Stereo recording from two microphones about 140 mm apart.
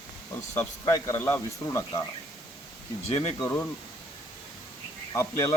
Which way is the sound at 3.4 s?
15° left (ahead or behind).